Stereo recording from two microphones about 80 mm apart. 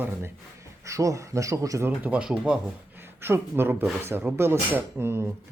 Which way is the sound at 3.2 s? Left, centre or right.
Right.